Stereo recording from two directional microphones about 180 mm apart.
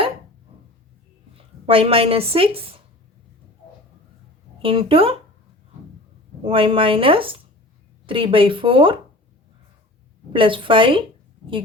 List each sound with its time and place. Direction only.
1.6 s a woman's voice: 30° right (ahead or behind)
4.6 s a woman's voice: 30° right (ahead or behind)
6.4 s speech: 30° right (ahead or behind)
10.3 s speech: 30° right (ahead or behind)